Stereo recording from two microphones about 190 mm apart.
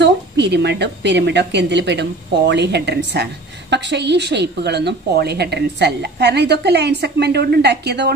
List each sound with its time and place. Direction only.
0.0 s a woman's voice: 65° right (ahead or behind)